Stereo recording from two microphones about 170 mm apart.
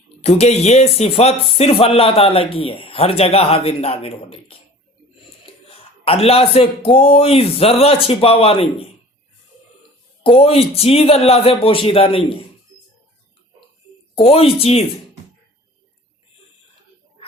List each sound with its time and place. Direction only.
0.2 s speech: 40° left (ahead or behind)
5.6 s speech: 35° left (ahead or behind)
10.2 s speech: 35° left (ahead or behind)
14.2 s speech: 35° left (ahead or behind)